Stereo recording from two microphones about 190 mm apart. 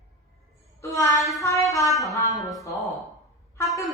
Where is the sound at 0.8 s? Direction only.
15° left (ahead or behind).